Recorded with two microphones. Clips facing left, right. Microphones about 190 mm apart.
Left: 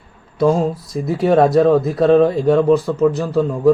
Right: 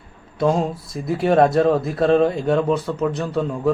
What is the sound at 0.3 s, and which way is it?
Speech, centre (ahead or behind).